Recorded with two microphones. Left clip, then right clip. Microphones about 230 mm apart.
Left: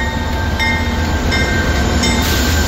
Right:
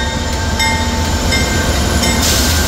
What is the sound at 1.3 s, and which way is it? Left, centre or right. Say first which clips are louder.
Train: even; right.